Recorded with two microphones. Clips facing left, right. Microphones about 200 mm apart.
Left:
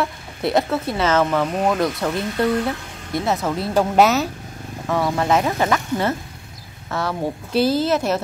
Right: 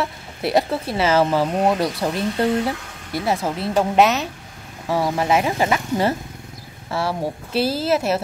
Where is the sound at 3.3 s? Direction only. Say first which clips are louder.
Even; 10° right (ahead or behind).